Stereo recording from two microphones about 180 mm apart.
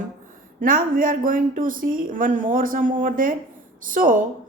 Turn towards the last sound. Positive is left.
turn(degrees=-50)  # may be behind; listen again after turning